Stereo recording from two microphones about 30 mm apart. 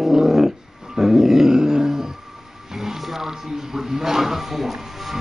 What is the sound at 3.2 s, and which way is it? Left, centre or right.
A man's voice, centre.